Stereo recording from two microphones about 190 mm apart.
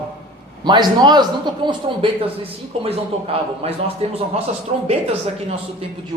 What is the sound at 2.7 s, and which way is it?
Speech, 30° right (ahead or behind).